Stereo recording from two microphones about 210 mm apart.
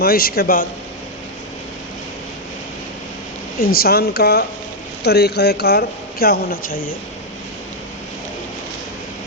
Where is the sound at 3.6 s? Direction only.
45° left (ahead or behind).